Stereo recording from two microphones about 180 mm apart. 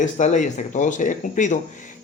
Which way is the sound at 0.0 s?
40° left (ahead or behind).